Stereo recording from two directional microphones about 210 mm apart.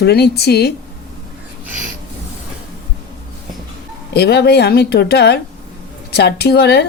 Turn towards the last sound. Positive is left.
turn(degrees=50)  # may be behind; listen again after turning